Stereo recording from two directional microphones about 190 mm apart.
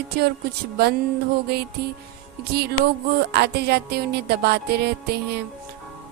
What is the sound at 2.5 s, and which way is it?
A woman's voice, 60° right (ahead or behind).